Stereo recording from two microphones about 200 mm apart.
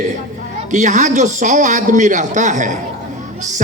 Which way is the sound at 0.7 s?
35° right (ahead or behind).